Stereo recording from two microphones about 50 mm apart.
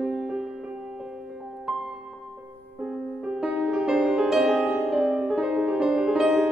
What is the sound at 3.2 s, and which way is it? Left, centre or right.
Music, centre.